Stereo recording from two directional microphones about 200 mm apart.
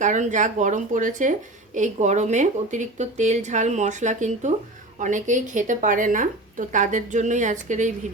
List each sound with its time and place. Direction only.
0.0 s speech: 40° right (ahead or behind)